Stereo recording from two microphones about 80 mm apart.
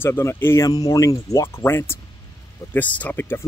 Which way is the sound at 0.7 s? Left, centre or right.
Left.